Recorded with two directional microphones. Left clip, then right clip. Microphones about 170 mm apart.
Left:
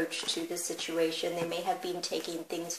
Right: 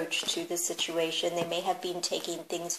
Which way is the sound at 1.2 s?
35° right (ahead or behind).